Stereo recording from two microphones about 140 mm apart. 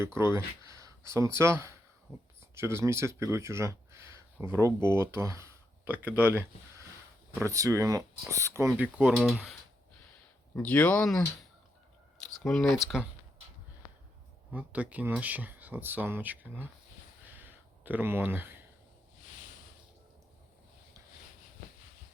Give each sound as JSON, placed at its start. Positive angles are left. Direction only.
{"t": 0.0, "sound": "speech", "side_deg": -20}
{"t": 10.5, "sound": "speech", "side_deg": 10}
{"t": 12.4, "sound": "speech", "side_deg": 5}
{"t": 14.5, "sound": "speech", "side_deg": -10}
{"t": 17.2, "sound": "a sound", "side_deg": -15}